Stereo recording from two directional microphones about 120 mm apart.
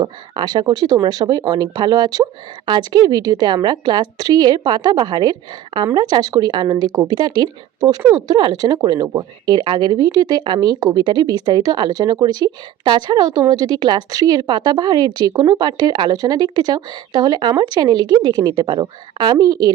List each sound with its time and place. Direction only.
0.0 s speech: 35° right (ahead or behind)